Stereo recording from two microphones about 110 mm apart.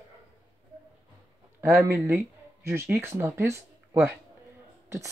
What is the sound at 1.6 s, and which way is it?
Speech, 20° right (ahead or behind).